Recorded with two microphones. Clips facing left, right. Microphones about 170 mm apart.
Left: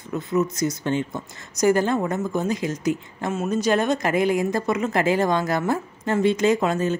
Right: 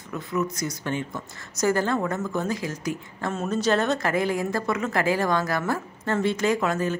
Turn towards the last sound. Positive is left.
turn(degrees=20)  # may be behind; listen again after turning